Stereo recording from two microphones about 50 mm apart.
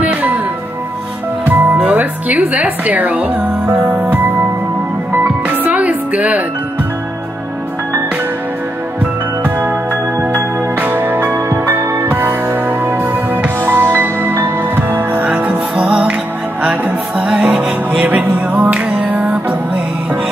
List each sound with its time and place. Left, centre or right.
0.0 s music: right
1.4 s music: right
1.9 s speech: right
3.9 s music: right
9.4 s music: right
10.8 s music: right
11.3 s music: right
12.1 s music: right
15.2 s music: right
17.2 s music: centre
18.0 s music: right